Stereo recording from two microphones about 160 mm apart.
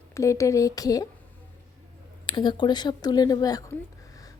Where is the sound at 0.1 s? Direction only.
20° left (ahead or behind).